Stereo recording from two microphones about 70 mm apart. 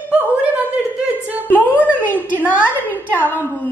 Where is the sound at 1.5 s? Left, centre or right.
Left.